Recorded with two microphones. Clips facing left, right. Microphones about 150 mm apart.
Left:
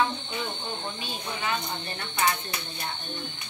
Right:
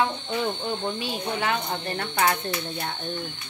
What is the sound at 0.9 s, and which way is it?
Speech, 70° right (ahead or behind).